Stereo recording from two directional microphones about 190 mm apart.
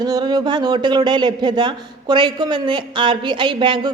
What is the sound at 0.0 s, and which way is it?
Speech, 20° right (ahead or behind).